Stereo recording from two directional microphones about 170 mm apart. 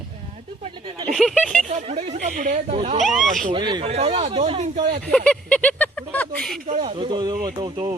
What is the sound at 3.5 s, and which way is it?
Speech, 30° right (ahead or behind).